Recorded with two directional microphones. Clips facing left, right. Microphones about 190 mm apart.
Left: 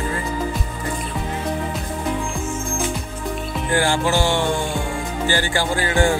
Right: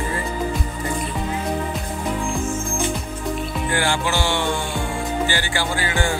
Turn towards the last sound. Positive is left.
turn(degrees=45)  # may be behind; listen again after turning